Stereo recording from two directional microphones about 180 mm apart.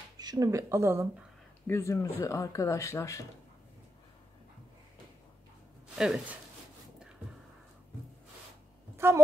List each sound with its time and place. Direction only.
0.2 s speech: 20° right (ahead or behind)
1.7 s speech: 15° left (ahead or behind)
5.9 s speech: 5° right (ahead or behind)
8.9 s a sound: 15° right (ahead or behind)